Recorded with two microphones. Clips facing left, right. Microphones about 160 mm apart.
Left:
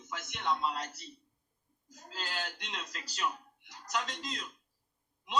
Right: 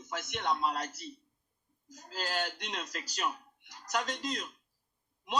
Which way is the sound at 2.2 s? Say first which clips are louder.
Right 5 dB; 45° right (ahead or behind).